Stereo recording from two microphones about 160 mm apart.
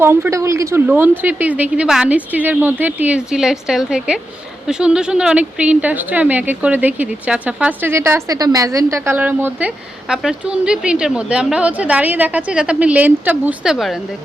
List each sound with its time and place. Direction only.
0.0 s speech: 15° right (ahead or behind)